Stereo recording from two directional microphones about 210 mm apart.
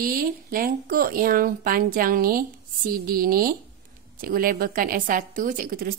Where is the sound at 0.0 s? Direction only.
45° right (ahead or behind).